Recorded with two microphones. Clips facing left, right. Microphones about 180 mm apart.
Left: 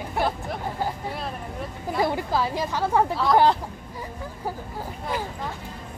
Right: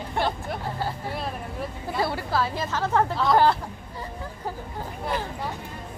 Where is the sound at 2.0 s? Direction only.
15° left (ahead or behind).